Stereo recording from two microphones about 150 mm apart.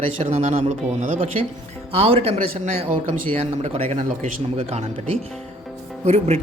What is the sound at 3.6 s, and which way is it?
Speech, 40° right (ahead or behind).